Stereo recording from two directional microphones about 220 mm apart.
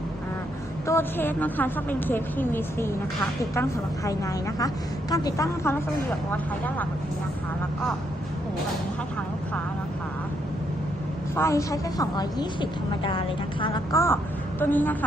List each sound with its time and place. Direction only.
0.9 s a woman's voice: 10° left (ahead or behind)
11.3 s a woman's voice: 15° left (ahead or behind)